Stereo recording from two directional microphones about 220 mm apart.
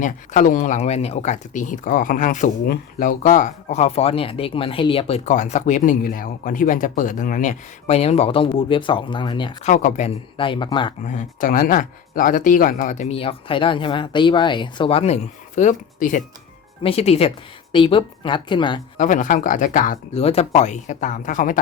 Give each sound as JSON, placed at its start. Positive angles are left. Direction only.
{"t": 0.0, "sound": "speech", "side_deg": 35}
{"t": 9.6, "sound": "speech", "side_deg": 35}
{"t": 11.0, "sound": "speech", "side_deg": 35}
{"t": 18.9, "sound": "speech", "side_deg": 35}